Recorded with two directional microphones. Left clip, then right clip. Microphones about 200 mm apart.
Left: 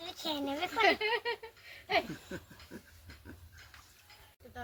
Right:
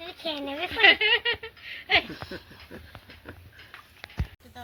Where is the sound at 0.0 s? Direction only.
25° left (ahead or behind).